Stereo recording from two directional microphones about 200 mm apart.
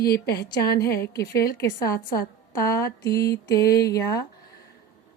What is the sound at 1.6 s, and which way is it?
A woman's voice, 15° left (ahead or behind).